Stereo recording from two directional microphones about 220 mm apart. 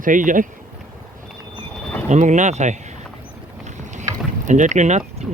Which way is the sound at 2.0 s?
35° right (ahead or behind).